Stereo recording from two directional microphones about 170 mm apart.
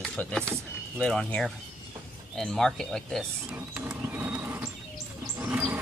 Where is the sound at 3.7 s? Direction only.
10° right (ahead or behind).